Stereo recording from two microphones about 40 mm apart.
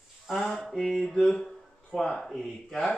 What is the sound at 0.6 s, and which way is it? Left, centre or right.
Speech, centre.